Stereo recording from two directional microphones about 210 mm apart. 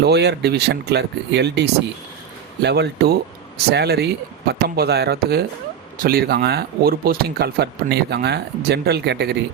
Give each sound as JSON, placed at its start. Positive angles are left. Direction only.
{"t": 0.0, "sound": "speech", "side_deg": -50}